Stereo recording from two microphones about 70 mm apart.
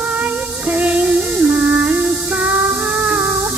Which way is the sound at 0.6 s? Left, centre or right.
Centre.